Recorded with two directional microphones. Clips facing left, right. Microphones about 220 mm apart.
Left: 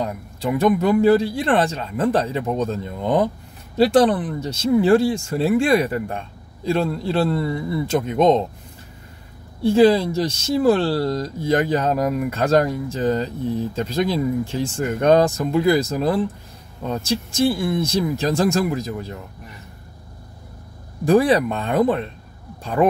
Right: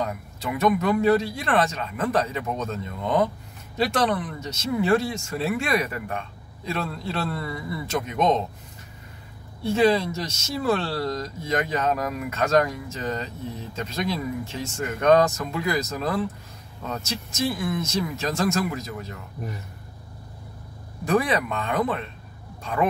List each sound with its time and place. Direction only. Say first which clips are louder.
0.0 s speech: left 5 dB; 30° left (ahead or behind)
9.6 s speech: left 6 dB; 30° left (ahead or behind)
21.0 s speech: left 7 dB; 30° left (ahead or behind)